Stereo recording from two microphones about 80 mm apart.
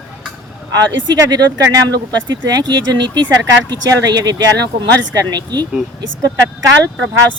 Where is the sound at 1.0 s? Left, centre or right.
Right.